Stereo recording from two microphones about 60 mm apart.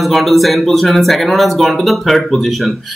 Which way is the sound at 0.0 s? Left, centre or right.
Centre.